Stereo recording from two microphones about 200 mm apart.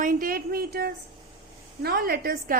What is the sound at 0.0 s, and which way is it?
A woman's voice, 40° right (ahead or behind).